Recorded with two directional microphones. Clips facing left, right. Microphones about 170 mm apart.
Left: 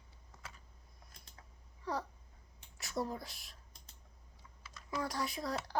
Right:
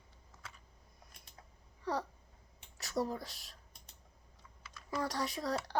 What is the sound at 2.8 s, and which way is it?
Speech, 35° right (ahead or behind).